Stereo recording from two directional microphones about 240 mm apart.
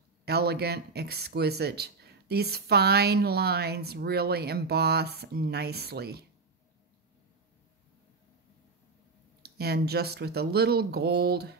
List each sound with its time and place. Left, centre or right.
0.2 s speech: right
9.4 s speech: right